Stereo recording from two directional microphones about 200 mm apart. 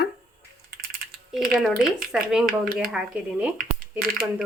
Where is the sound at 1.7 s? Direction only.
45° right (ahead or behind).